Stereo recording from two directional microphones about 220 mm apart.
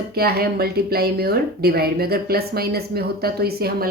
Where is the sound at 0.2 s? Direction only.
45° right (ahead or behind).